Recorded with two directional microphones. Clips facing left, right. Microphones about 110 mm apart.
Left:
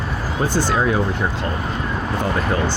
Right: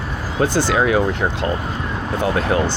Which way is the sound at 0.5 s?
80° right.